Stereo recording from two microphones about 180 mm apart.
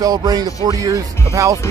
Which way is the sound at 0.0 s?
20° right (ahead or behind).